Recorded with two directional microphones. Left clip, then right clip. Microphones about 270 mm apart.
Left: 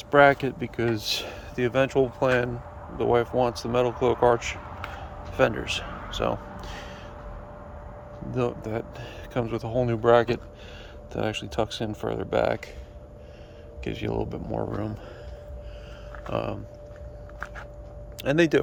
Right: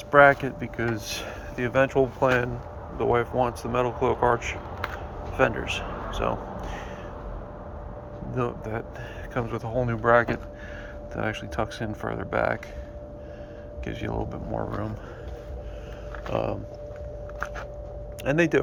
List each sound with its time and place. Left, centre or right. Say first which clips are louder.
0.1 s speech: right 1 dB; left
8.3 s speech: left 2 dB; left
13.8 s speech: left 2 dB; left
16.3 s speech: right 2 dB; centre
18.2 s speech: left 1 dB; centre